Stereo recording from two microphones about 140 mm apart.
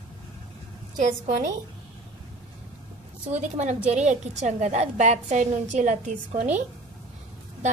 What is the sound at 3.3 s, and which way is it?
A woman's voice, 55° right (ahead or behind).